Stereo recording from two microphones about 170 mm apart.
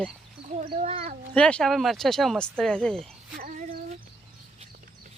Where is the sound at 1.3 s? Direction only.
5° left (ahead or behind).